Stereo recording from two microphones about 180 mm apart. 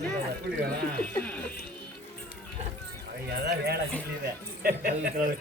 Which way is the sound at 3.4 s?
65° right (ahead or behind).